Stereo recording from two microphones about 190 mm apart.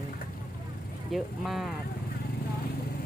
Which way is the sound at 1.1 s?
Centre (ahead or behind).